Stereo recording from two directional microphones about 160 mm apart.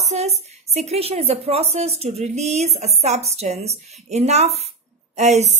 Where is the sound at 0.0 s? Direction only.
40° right (ahead or behind).